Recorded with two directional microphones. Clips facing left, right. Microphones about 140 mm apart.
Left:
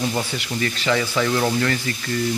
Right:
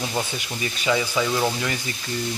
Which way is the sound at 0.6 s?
15° right (ahead or behind).